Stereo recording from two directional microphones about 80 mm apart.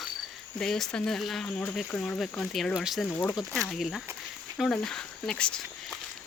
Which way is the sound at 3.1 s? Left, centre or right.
Left.